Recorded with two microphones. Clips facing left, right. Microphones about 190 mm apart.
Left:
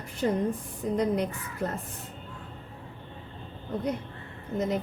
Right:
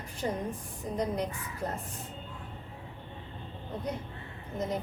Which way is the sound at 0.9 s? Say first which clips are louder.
Left 5 dB; 65° left (ahead or behind).